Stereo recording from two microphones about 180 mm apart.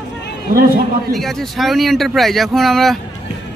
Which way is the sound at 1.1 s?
Centre (ahead or behind).